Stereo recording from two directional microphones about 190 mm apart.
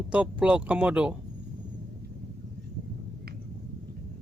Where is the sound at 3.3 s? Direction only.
55° right (ahead or behind).